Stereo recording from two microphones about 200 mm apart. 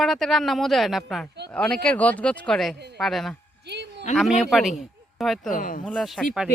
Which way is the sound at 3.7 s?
55° right (ahead or behind).